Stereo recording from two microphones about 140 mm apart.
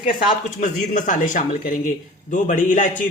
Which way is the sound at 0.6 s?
70° left (ahead or behind).